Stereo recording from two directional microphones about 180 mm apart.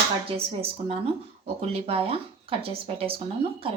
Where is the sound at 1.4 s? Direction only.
35° right (ahead or behind).